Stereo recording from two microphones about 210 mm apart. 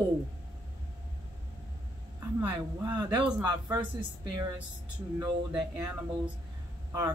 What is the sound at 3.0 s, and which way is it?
Speech, 20° right (ahead or behind).